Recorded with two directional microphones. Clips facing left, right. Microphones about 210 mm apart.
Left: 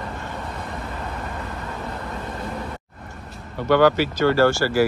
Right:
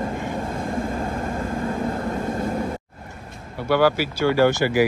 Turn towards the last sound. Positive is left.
turn(degrees=-15)  # may be behind; listen again after turning